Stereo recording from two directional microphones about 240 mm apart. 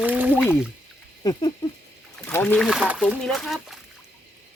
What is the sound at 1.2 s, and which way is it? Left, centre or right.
Patter, centre.